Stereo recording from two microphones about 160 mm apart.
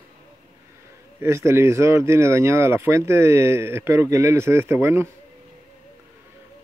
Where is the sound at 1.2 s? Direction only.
15° right (ahead or behind).